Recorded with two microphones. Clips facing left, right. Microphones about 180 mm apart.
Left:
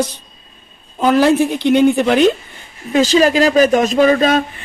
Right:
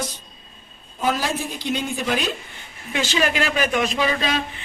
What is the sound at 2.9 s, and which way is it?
Speech, 40° left (ahead or behind).